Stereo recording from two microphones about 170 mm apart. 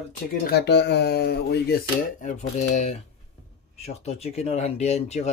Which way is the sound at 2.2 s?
45° left (ahead or behind).